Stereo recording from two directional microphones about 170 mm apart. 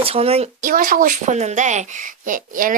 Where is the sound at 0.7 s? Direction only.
50° right (ahead or behind).